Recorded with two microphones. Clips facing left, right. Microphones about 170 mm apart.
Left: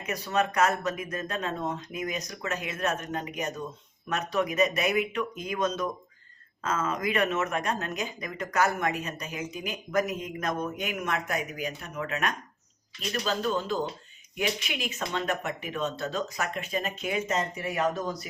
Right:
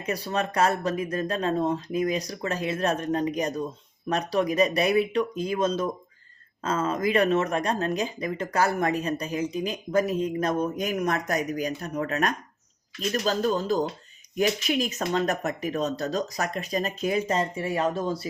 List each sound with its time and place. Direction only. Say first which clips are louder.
0.0 s speech: even; 35° right (ahead or behind)